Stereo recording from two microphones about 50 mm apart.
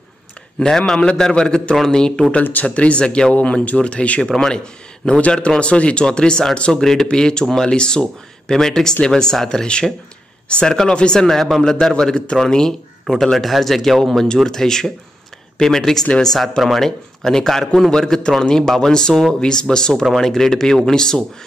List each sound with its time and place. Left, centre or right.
0.6 s speech: centre
2.6 s speech: left
4.3 s speech: centre
5.2 s speech: left
11.2 s speech: centre